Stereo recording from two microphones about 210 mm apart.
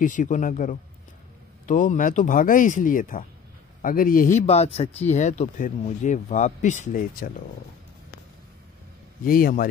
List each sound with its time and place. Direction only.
0.0 s speech: 40° left (ahead or behind)
9.2 s a man's voice: 40° left (ahead or behind)